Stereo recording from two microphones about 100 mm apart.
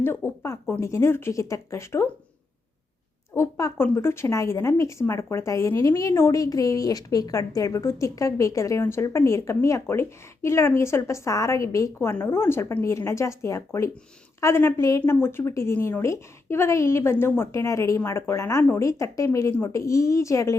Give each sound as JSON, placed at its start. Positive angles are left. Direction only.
{"t": 0.0, "sound": "speech", "side_deg": 25}
{"t": 3.3, "sound": "speech", "side_deg": 30}